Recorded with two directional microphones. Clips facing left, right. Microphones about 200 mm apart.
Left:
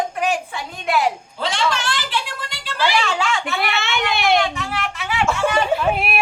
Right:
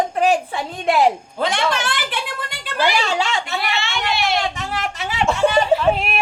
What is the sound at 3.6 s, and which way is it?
Speech, 55° left (ahead or behind).